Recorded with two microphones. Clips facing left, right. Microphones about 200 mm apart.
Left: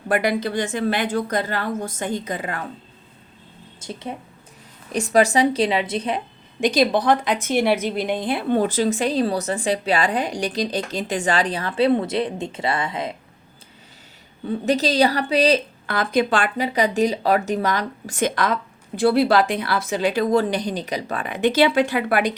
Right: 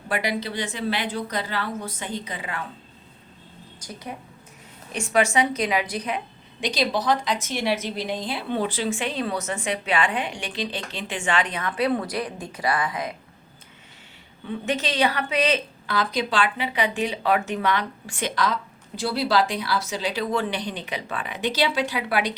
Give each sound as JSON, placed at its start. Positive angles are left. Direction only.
{"t": 0.1, "sound": "speech", "side_deg": 50}
{"t": 3.8, "sound": "speech", "side_deg": 25}
{"t": 4.9, "sound": "a woman's voice", "side_deg": 40}
{"t": 6.6, "sound": "a woman's voice", "side_deg": 50}
{"t": 14.4, "sound": "a woman's voice", "side_deg": 35}
{"t": 15.9, "sound": "speech", "side_deg": 55}